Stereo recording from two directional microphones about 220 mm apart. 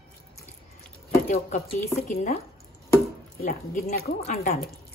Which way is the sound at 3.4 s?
40° left (ahead or behind).